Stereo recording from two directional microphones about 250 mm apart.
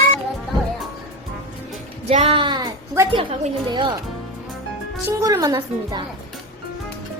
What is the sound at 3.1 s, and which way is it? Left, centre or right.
Speech, centre.